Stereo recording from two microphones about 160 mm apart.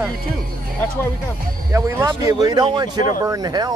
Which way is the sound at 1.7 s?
20° right (ahead or behind).